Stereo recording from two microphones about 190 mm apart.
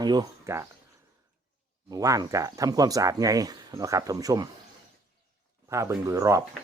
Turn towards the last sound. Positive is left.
turn(degrees=-15)  # may be behind; listen again after turning